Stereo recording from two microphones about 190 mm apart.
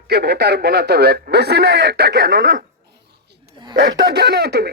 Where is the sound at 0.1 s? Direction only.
60° right (ahead or behind).